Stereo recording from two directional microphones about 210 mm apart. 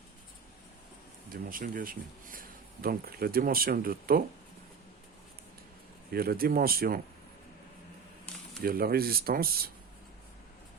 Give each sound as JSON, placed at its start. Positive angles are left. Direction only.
{"t": 1.3, "sound": "speech", "side_deg": -40}
{"t": 6.1, "sound": "speech", "side_deg": -45}
{"t": 8.6, "sound": "speech", "side_deg": -45}